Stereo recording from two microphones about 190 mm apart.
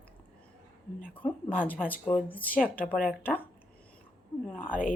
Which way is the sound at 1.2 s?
10° left (ahead or behind).